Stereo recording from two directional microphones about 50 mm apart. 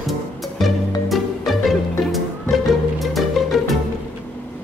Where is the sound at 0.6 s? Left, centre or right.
Centre.